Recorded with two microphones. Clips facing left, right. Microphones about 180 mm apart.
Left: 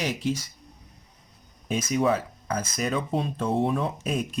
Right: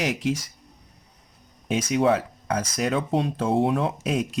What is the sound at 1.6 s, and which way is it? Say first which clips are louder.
Speech: right 3 dB; 75° right (ahead or behind).